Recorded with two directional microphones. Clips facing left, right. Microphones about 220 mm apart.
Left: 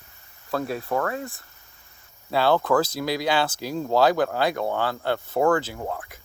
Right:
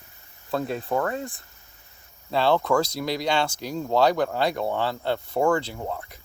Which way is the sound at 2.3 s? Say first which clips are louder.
Left 1 dB; 5° left (ahead or behind).